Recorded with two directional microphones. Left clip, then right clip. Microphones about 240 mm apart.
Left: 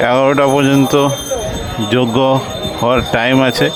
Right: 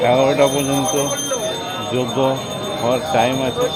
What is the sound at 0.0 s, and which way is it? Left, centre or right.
Speech, left.